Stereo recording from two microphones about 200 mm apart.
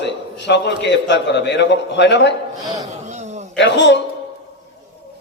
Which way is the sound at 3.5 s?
60° left (ahead or behind).